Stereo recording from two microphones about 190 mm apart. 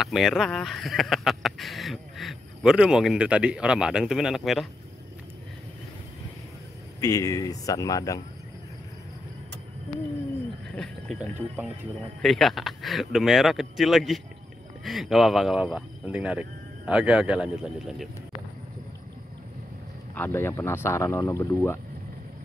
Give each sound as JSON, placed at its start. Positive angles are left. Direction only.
{"t": 0.0, "sound": "speech", "side_deg": 0}
{"t": 7.0, "sound": "speech", "side_deg": 20}
{"t": 10.8, "sound": "speech", "side_deg": 0}
{"t": 20.2, "sound": "speech", "side_deg": 10}